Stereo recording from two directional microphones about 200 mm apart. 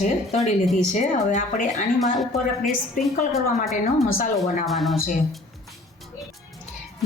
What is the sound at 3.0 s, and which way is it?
Speech, 40° left (ahead or behind).